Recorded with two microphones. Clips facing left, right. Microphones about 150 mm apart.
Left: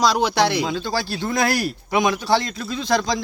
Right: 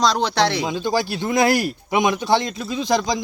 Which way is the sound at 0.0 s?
10° left (ahead or behind).